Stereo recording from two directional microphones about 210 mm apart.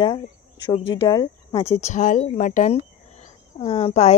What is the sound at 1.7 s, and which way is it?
Speech, 35° left (ahead or behind).